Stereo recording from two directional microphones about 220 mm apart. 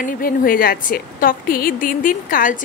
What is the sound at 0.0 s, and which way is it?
A woman's voice, 40° left (ahead or behind).